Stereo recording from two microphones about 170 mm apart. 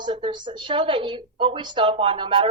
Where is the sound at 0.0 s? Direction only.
25° right (ahead or behind).